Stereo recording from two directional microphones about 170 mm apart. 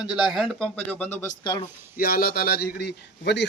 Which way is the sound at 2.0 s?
60° left (ahead or behind).